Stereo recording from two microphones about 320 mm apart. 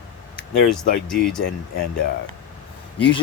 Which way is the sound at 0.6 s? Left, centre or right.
Centre.